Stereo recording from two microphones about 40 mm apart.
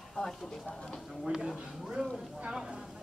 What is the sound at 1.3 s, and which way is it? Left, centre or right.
Speech, centre.